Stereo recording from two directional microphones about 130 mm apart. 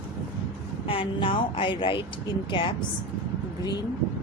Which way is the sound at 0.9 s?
45° left (ahead or behind).